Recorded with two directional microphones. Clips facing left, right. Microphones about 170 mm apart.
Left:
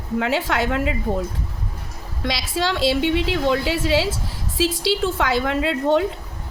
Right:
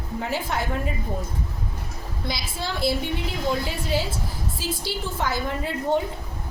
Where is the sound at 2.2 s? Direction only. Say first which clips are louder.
Left 8 dB; 90° left.